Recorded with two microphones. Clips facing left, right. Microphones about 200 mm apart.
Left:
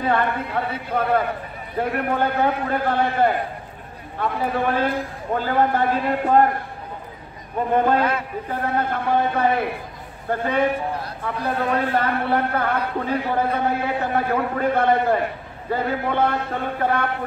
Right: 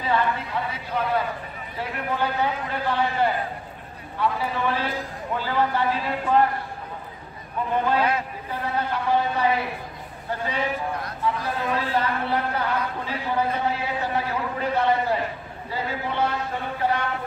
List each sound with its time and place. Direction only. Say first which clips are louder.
0.0 s a man's voice: left 3 dB; 55° left (ahead or behind)
7.7 s a man's voice: left 3 dB; 50° left (ahead or behind)